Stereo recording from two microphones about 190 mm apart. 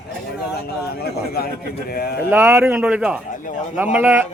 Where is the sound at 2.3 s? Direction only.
15° right (ahead or behind).